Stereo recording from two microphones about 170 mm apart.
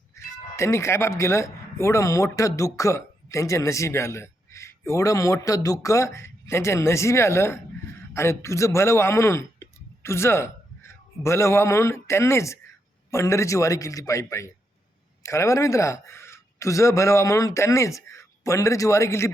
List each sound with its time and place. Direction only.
0.5 s a man's voice: 15° left (ahead or behind)